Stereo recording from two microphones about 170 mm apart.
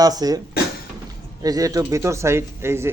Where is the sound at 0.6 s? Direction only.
65° left (ahead or behind).